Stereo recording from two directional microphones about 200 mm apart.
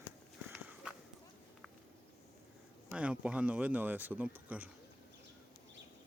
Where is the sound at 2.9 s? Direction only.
5° right (ahead or behind).